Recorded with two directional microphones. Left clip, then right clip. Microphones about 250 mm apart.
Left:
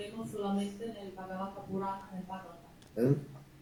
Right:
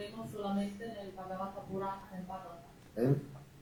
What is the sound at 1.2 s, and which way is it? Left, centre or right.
Speech, left.